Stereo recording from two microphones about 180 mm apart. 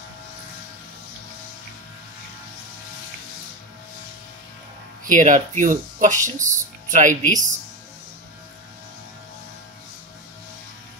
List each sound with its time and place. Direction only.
5.0 s speech: 45° right (ahead or behind)